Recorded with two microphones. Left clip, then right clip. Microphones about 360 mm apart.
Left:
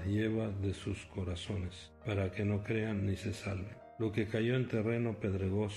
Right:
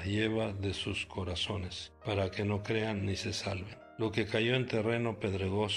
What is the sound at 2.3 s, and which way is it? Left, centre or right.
Speech, right.